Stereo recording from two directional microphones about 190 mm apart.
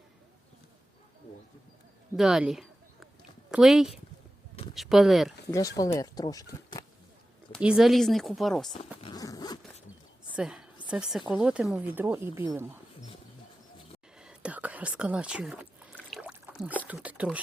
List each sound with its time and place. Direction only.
2.1 s a sound: centre (ahead or behind)
3.5 s speech: centre (ahead or behind)
5.5 s speech: 20° left (ahead or behind)
7.6 s speech: 5° right (ahead or behind)
9.0 s zipper: 25° left (ahead or behind)
10.3 s a sound: 5° right (ahead or behind)
10.8 s a woman's voice: 5° right (ahead or behind)
14.2 s whispering: 5° right (ahead or behind)
16.0 s a sound: centre (ahead or behind)
16.8 s speech: 5° right (ahead or behind)